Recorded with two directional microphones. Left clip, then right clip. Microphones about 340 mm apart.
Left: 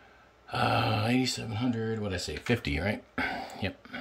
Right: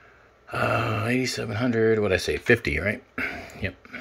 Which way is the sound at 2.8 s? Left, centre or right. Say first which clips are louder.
Right 4 dB; centre.